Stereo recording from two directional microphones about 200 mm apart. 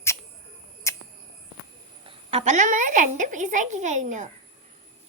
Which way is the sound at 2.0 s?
35° right (ahead or behind).